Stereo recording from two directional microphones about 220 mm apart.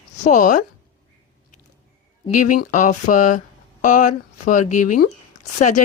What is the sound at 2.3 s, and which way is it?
Speech, 90° left.